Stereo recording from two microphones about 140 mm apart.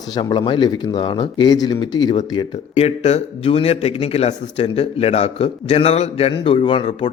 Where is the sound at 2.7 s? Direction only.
50° left (ahead or behind).